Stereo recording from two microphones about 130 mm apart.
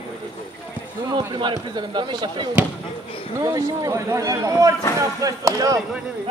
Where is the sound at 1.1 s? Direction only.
35° right (ahead or behind).